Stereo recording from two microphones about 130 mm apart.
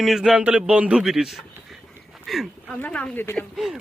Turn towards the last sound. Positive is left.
turn(degrees=0)  # may be behind; listen again after turning